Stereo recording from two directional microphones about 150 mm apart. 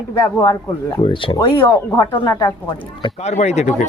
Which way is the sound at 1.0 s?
35° left (ahead or behind).